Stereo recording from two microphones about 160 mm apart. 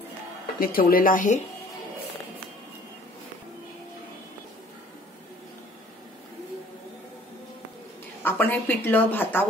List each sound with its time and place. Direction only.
0.6 s speech: 65° left (ahead or behind)
8.2 s speech: 10° left (ahead or behind)